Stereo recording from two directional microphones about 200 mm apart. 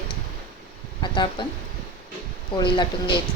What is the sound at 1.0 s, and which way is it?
Speech, 25° left (ahead or behind).